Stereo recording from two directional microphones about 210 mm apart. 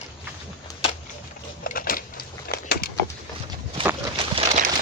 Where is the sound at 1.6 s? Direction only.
45° left (ahead or behind).